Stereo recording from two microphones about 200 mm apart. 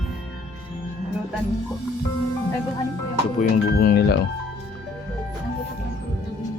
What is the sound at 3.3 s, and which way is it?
Speech, 50° left (ahead or behind).